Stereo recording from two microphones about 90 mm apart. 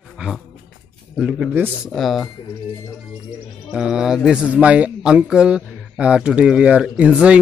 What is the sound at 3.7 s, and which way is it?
Speech, 5° right (ahead or behind).